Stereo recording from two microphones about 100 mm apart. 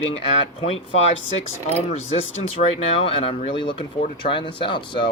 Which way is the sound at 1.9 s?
90° left.